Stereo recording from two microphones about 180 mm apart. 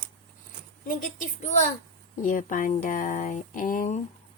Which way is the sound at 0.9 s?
50° left (ahead or behind).